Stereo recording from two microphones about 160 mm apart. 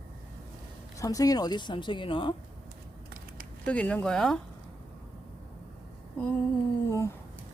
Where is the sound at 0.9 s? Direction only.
20° left (ahead or behind).